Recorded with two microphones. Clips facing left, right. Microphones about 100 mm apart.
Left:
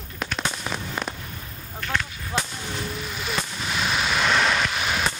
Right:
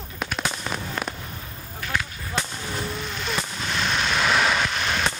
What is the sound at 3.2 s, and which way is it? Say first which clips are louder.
Artillery fire: left 1 dB; 5° left (ahead or behind).